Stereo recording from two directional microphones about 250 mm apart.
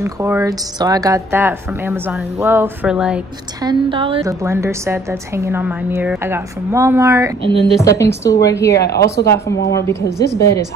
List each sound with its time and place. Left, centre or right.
0.0 s a woman's voice: centre
3.6 s a woman's voice: right
7.5 s a woman's voice: centre
8.2 s a woman's voice: centre
8.7 s speech: left
9.1 s a woman's voice: centre